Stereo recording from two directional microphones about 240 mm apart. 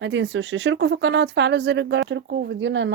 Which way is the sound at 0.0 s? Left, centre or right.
Right.